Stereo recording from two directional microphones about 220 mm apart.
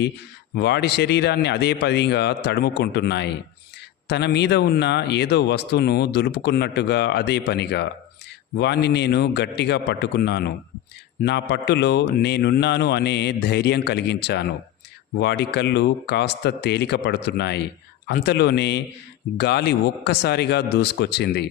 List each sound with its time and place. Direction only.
0.5 s speech: 50° left (ahead or behind)